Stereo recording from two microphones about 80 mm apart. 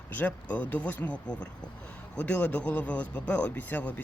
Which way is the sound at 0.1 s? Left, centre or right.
Centre.